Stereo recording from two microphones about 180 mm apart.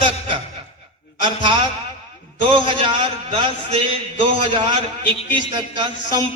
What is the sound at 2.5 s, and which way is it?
A man's voice, 25° right (ahead or behind).